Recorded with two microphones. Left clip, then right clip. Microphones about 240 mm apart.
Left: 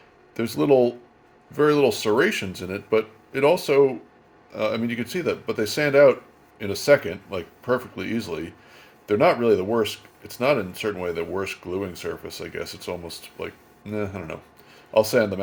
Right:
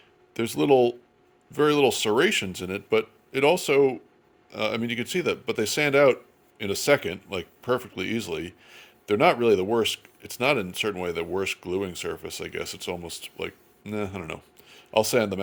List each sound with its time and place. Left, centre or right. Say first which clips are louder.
0.3 s speech: left 2 dB; right